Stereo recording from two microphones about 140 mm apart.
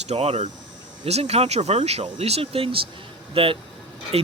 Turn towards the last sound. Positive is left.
turn(degrees=-50)  # may be behind; listen again after turning